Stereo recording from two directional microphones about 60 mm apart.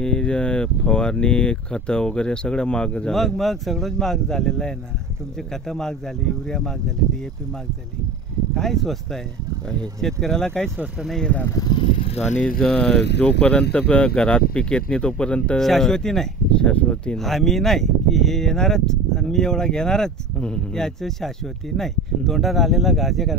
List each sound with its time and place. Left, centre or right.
0.0 s speech: centre
3.1 s speech: centre
8.5 s speech: centre
10.2 s speech: centre
17.2 s speech: centre